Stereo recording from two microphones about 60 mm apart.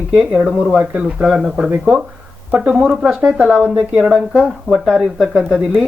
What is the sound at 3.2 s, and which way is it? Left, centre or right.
Speech, right.